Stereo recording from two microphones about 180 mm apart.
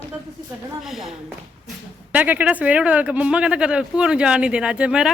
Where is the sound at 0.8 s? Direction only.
Centre (ahead or behind).